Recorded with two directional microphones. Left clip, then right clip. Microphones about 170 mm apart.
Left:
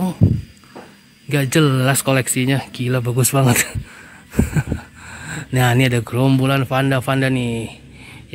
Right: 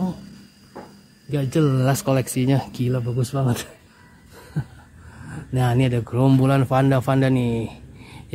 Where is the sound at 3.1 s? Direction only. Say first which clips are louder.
Left 8 dB; 20° left (ahead or behind).